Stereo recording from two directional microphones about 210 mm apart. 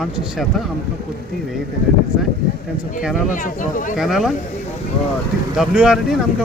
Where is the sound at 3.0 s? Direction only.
Centre (ahead or behind).